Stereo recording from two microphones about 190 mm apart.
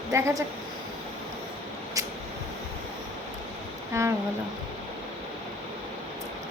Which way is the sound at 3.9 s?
15° right (ahead or behind).